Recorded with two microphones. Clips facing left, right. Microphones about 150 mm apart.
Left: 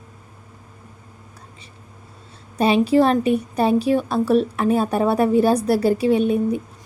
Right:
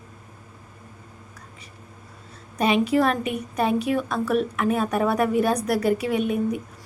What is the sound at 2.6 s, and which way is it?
A woman's voice, 30° left (ahead or behind).